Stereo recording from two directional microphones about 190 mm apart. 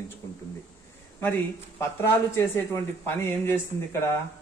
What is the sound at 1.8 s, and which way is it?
A man's voice, 15° left (ahead or behind).